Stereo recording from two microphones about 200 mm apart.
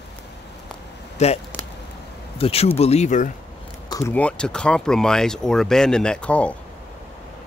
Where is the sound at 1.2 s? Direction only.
35° left (ahead or behind).